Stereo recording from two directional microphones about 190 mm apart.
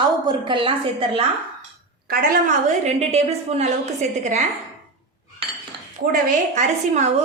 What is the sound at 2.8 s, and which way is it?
A woman's voice, 35° right (ahead or behind).